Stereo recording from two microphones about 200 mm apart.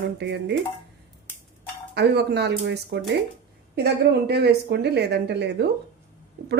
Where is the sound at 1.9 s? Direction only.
55° right (ahead or behind).